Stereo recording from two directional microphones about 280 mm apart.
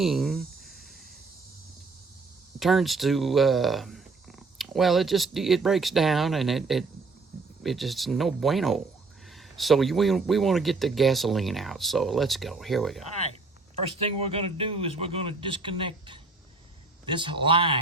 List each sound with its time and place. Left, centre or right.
0.0 s a sound: centre
2.6 s a man's voice: centre
13.7 s a man's voice: right